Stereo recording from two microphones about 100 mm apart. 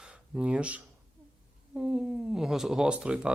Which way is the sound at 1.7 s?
10° right (ahead or behind).